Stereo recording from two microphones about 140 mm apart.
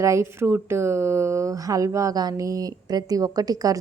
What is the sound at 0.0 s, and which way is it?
A woman's voice, 20° right (ahead or behind).